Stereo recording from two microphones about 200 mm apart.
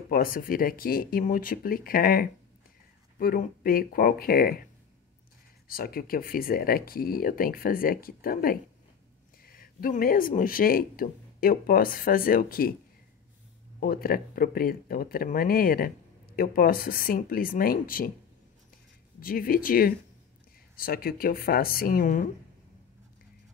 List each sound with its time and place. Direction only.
0.1 s speech: 45° left (ahead or behind)
5.7 s speech: 45° left (ahead or behind)
13.7 s speech: 45° left (ahead or behind)
19.1 s speech: 45° left (ahead or behind)